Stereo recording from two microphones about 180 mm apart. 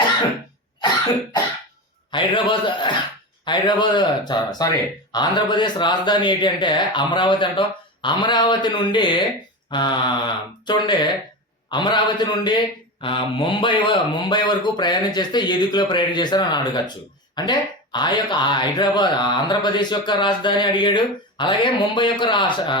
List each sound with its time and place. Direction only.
2.0 s speech: 25° left (ahead or behind)